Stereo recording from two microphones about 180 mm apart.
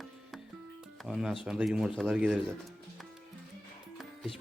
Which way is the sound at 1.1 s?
5° right (ahead or behind).